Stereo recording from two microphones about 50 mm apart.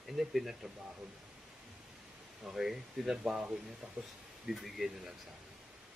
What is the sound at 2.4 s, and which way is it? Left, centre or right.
Speech, centre.